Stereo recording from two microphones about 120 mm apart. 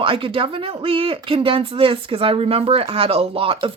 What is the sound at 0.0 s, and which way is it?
Speech, 45° right (ahead or behind).